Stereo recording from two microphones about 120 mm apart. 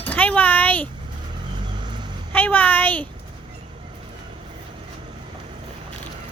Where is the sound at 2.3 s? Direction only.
15° left (ahead or behind).